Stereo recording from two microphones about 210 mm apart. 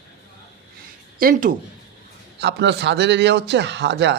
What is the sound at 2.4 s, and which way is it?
A man's voice, 55° right (ahead or behind).